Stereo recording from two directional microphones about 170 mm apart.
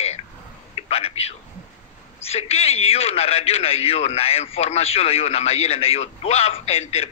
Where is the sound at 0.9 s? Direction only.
35° left (ahead or behind).